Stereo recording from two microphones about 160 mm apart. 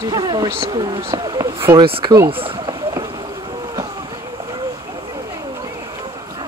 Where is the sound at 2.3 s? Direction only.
35° right (ahead or behind).